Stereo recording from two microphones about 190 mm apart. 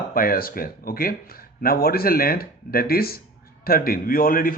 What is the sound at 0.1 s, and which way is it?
Speech, 50° left (ahead or behind).